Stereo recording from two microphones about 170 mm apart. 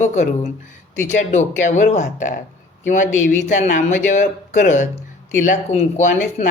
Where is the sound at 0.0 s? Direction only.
45° left (ahead or behind).